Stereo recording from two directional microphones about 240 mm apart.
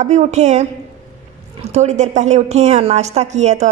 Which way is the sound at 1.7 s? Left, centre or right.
Right.